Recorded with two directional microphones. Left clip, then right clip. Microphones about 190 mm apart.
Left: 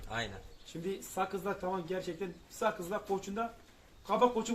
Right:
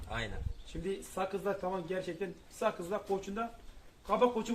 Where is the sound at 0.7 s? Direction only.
15° left (ahead or behind).